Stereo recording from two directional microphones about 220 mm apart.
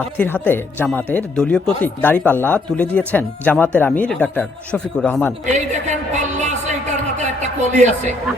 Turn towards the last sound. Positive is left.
turn(degrees=-30)  # may be behind; listen again after turning